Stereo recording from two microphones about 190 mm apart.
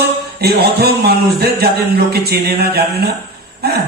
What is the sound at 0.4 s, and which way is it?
A man's voice, 55° right (ahead or behind).